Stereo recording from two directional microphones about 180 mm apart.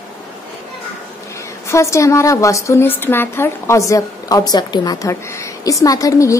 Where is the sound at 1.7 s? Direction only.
15° left (ahead or behind).